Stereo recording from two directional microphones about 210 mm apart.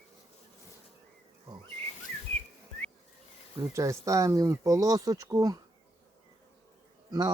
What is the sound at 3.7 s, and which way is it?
Speech, 15° right (ahead or behind).